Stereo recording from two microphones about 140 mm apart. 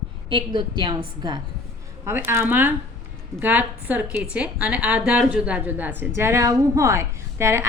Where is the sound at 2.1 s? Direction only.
15° right (ahead or behind).